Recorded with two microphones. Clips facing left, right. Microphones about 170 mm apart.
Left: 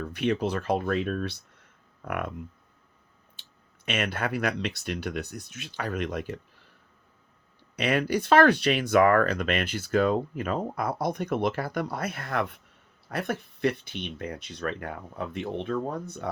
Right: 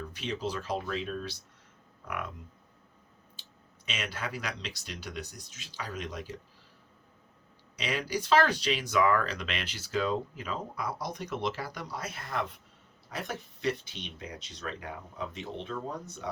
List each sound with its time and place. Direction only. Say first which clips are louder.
0.0 s speech: left 8 dB; 60° left (ahead or behind)
2.0 s hum: left 6 dB; 55° left (ahead or behind)
3.4 s clicking: right 2 dB; 60° left (ahead or behind)
3.8 s speech: left 8 dB; 60° left (ahead or behind)
7.8 s speech: left 7 dB; 60° left (ahead or behind)